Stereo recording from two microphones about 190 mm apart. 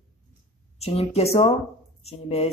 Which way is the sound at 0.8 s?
30° left (ahead or behind).